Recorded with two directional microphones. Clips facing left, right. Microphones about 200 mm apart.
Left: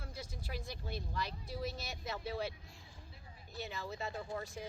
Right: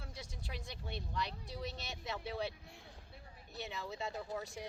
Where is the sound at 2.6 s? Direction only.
60° right (ahead or behind).